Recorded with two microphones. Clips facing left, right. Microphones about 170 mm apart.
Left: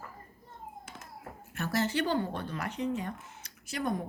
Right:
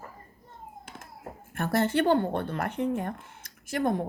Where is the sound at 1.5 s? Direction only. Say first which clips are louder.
Right 5 dB; 55° right (ahead or behind).